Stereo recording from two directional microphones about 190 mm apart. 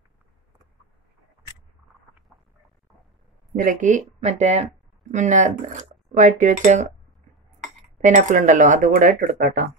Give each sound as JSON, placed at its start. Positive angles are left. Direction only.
{"t": 3.5, "sound": "speech", "side_deg": -45}
{"t": 9.3, "sound": "speech", "side_deg": -60}